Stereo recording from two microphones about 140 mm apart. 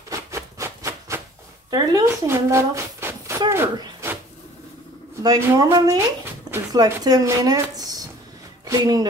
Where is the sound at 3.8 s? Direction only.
20° right (ahead or behind).